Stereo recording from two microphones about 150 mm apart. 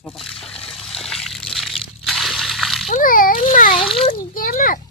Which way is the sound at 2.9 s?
65° left (ahead or behind).